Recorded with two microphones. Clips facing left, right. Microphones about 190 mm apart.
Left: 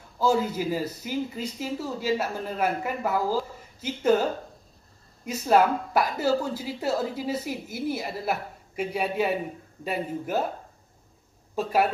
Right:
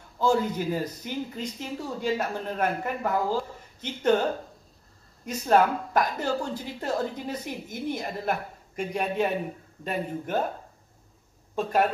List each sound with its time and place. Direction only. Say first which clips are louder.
0.2 s speech: even; 5° left (ahead or behind)
11.5 s a man's voice: even; 10° left (ahead or behind)